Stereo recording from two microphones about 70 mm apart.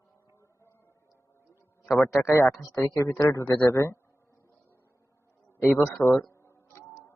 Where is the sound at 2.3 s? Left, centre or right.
Left.